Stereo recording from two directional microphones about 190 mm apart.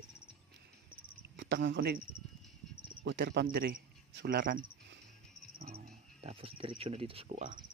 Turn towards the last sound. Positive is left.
turn(degrees=-35)  # may be behind; listen again after turning